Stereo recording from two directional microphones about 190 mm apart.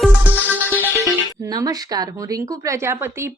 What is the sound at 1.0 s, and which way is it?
Speech, 20° right (ahead or behind).